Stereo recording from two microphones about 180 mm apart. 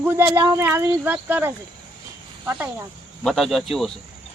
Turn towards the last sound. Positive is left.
turn(degrees=0)  # may be behind; listen again after turning